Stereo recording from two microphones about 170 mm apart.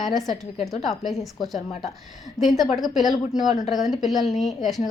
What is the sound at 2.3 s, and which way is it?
A woman's voice, centre (ahead or behind).